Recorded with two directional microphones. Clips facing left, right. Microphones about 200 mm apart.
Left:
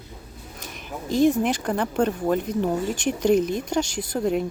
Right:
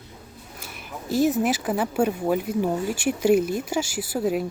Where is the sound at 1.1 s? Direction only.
5° right (ahead or behind).